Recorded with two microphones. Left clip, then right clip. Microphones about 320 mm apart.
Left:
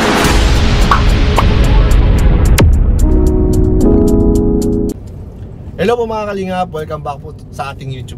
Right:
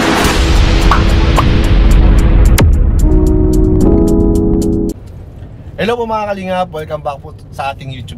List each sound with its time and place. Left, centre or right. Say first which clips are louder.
0.0 s music: even; centre
5.9 s a man's voice: even; centre